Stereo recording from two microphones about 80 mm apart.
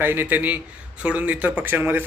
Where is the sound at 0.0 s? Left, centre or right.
Right.